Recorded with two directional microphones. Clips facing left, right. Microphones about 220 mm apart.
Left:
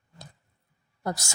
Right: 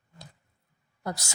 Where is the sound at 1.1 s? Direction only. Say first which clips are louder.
Left 3 dB; 45° left (ahead or behind).